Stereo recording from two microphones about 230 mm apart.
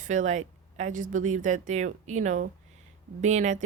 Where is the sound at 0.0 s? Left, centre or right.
Right.